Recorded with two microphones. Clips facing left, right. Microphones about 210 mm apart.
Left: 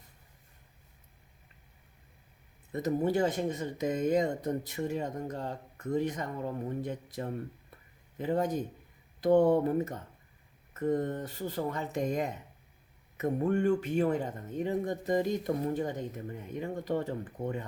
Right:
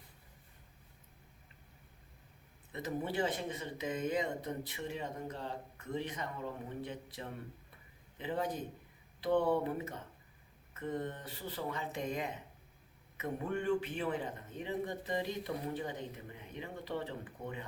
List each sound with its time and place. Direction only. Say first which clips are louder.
2.7 s speech: left 8 dB; 45° left (ahead or behind)